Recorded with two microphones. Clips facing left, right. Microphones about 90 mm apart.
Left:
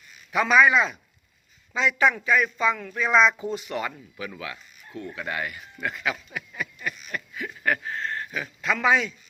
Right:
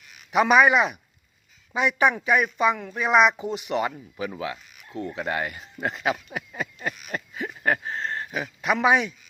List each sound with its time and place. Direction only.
0.3 s speech: 20° right (ahead or behind)
7.1 s a sound: 30° right (ahead or behind)
8.6 s speech: 20° right (ahead or behind)